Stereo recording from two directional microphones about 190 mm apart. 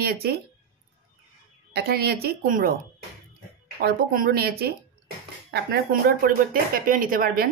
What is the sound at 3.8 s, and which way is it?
Speech, 50° right (ahead or behind).